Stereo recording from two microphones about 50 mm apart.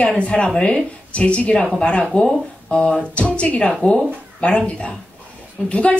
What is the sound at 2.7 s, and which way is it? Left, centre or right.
Music, centre.